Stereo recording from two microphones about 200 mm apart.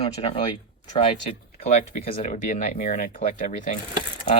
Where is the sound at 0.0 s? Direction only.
30° left (ahead or behind).